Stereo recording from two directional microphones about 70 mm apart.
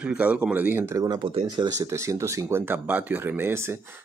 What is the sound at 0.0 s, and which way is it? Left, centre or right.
Speech, centre.